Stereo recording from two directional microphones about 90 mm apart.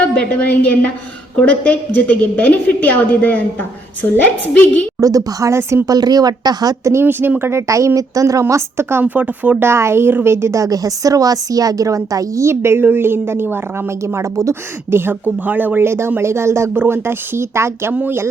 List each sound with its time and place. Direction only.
0.0 s a woman's voice: 15° left (ahead or behind)
4.9 s speech: 40° right (ahead or behind)
5.9 s speech: 45° right (ahead or behind)
6.9 s speech: 25° right (ahead or behind)